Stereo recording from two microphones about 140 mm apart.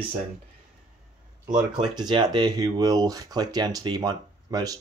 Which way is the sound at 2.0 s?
35° right (ahead or behind).